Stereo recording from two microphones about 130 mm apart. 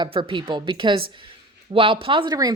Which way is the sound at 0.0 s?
40° right (ahead or behind).